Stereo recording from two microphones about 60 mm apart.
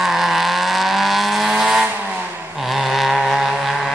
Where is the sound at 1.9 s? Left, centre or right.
Right.